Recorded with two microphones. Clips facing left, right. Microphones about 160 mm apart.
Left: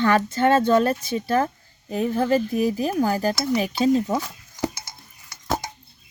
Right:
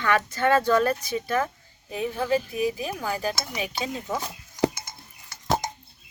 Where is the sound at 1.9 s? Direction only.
45° left (ahead or behind).